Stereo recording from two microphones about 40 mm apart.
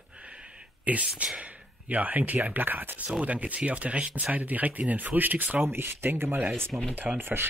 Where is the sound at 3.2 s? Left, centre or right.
Right.